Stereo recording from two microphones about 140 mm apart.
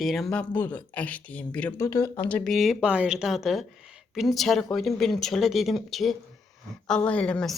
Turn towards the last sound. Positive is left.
turn(degrees=10)  # may be behind; listen again after turning